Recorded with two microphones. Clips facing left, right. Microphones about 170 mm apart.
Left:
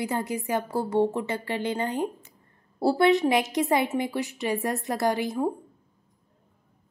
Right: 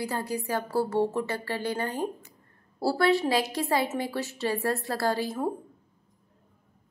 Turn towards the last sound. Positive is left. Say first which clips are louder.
# left 3 dB
turn(degrees=15)  # may be behind; listen again after turning